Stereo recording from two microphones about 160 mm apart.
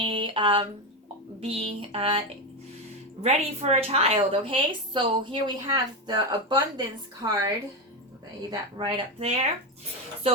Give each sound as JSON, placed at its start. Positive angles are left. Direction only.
{"t": 0.0, "sound": "a sound", "side_deg": -30}
{"t": 1.4, "sound": "a woman's voice", "side_deg": -35}
{"t": 3.2, "sound": "a woman's voice", "side_deg": -40}